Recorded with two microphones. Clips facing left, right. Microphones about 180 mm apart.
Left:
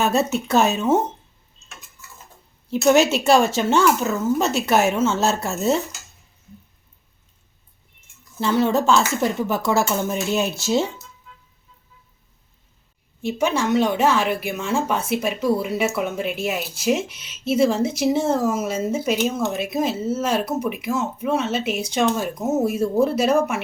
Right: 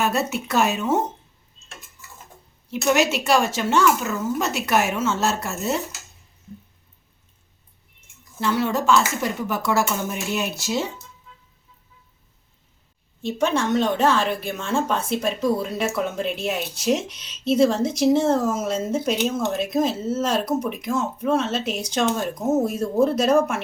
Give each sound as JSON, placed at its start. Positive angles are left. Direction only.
{"t": 0.4, "sound": "speech", "side_deg": 25}
{"t": 2.6, "sound": "speech", "side_deg": 30}
{"t": 8.4, "sound": "speech", "side_deg": 25}
{"t": 13.2, "sound": "a woman's voice", "side_deg": 10}